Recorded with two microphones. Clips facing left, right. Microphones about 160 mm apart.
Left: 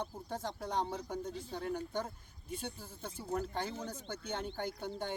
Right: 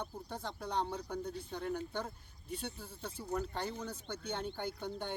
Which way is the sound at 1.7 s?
15° left (ahead or behind).